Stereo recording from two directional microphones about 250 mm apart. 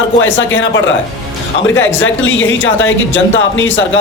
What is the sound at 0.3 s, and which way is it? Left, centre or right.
Speech, left.